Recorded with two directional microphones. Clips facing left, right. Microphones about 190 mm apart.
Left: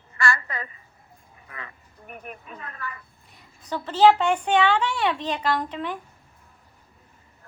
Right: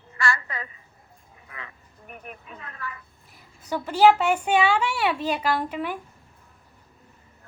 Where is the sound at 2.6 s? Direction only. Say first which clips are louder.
Even; 45° left (ahead or behind).